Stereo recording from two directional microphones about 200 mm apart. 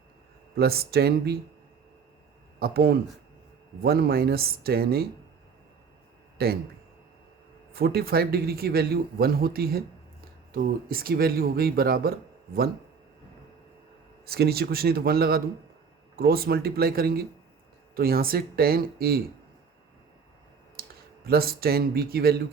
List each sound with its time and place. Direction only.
0.5 s speech: 50° right (ahead or behind)
2.6 s speech: 50° right (ahead or behind)
6.4 s speech: 50° right (ahead or behind)
7.7 s speech: 50° right (ahead or behind)
14.3 s speech: 50° right (ahead or behind)
20.8 s clicking: 50° right (ahead or behind)
21.2 s speech: 50° right (ahead or behind)